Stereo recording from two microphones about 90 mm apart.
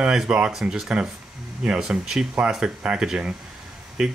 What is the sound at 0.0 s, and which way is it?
Speech, 10° right (ahead or behind).